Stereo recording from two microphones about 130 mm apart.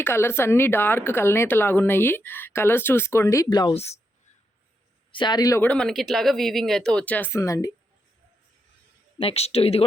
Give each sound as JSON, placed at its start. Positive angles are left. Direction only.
{"t": 0.0, "sound": "speech", "side_deg": 20}
{"t": 5.1, "sound": "speech", "side_deg": 35}
{"t": 5.6, "sound": "speech", "side_deg": 5}
{"t": 9.1, "sound": "speech", "side_deg": 50}